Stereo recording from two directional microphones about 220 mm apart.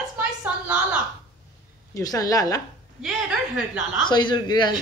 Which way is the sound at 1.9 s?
15° left (ahead or behind).